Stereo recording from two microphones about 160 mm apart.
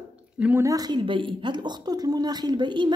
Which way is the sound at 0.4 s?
15° right (ahead or behind).